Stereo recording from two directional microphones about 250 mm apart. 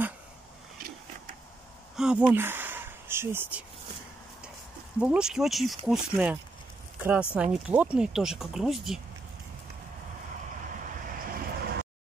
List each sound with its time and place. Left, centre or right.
2.0 s speech: centre
5.0 s speech: centre
11.1 s a sound: right